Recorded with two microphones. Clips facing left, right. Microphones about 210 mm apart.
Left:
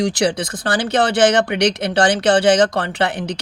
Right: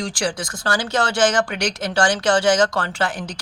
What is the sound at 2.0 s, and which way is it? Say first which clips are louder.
Speech: left 3 dB; 20° left (ahead or behind).